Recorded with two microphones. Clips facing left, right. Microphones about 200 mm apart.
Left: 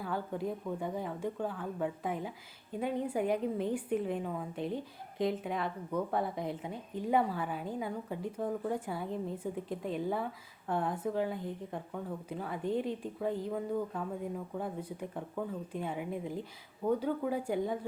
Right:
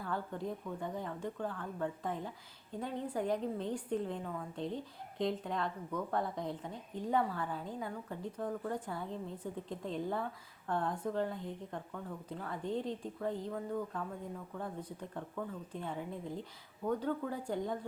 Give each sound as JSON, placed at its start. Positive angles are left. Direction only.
{"t": 0.0, "sound": "a woman's voice", "side_deg": 5}